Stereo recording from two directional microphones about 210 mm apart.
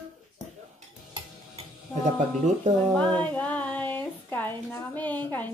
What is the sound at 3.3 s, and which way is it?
Speech, 5° left (ahead or behind).